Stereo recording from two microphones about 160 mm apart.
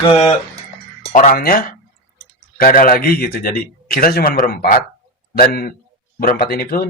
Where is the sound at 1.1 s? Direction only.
55° left (ahead or behind); by 6.9 s 70° left (ahead or behind).